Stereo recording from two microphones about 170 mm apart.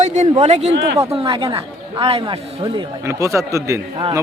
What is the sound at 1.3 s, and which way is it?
Speech, 30° right (ahead or behind).